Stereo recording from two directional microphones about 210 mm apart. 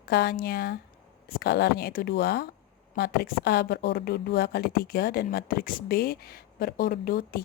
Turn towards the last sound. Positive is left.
turn(degrees=45)  # may be behind; listen again after turning